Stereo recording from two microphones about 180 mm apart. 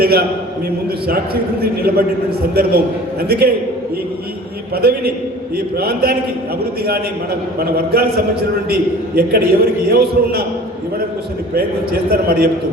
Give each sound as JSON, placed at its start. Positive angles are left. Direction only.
{"t": 0.0, "sound": "a man's voice", "side_deg": -60}
{"t": 4.7, "sound": "a man's voice", "side_deg": -60}
{"t": 11.5, "sound": "a man's voice", "side_deg": -55}